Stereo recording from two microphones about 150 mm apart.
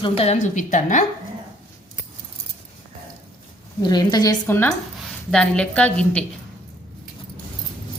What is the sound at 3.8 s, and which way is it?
Speech, 30° left (ahead or behind).